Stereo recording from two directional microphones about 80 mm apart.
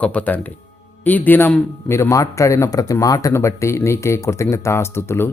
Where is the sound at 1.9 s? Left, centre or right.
Left.